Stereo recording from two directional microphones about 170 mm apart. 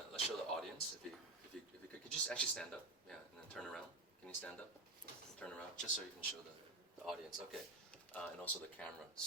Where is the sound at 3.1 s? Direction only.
5° left (ahead or behind).